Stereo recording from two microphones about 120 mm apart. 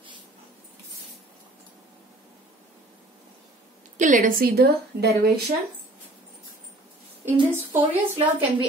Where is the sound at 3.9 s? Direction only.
90° right.